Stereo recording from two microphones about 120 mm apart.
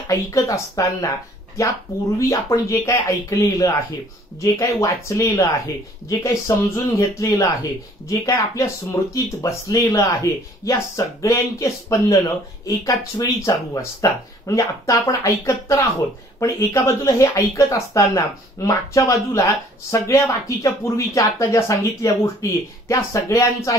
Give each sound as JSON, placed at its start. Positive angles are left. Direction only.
{"t": 0.4, "sound": "speech", "side_deg": 30}
{"t": 2.1, "sound": "speech", "side_deg": 25}